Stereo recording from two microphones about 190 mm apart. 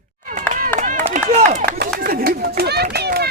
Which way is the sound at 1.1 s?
40° right (ahead or behind).